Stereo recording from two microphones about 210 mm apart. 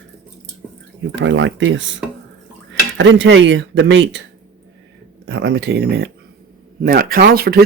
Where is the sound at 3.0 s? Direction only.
60° right (ahead or behind).